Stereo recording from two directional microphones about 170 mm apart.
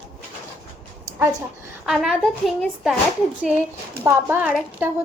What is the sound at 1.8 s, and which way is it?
A woman's voice, 5° right (ahead or behind).